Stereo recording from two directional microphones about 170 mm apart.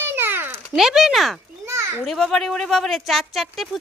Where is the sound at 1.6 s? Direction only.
15° right (ahead or behind).